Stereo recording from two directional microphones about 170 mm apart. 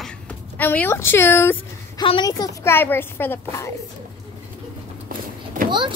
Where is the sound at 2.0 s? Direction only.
25° left (ahead or behind).